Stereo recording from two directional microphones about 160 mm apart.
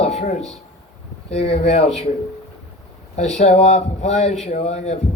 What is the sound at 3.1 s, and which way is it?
A man's voice, 45° left (ahead or behind).